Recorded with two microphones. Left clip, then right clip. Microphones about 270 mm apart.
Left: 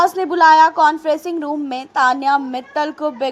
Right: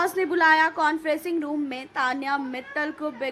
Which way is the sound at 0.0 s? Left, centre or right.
Centre.